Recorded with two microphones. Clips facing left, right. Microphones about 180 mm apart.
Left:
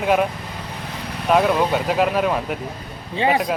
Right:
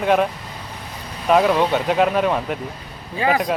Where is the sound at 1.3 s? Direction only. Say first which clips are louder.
Right 1 dB; centre (ahead or behind).